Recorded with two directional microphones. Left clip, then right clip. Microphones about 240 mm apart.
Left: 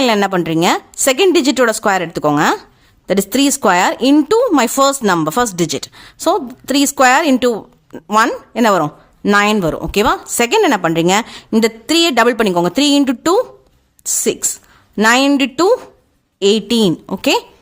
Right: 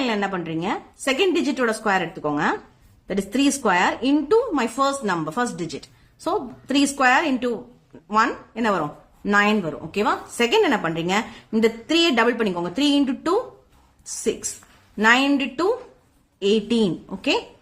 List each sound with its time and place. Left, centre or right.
0.0 s speech: left
14.9 s speech: left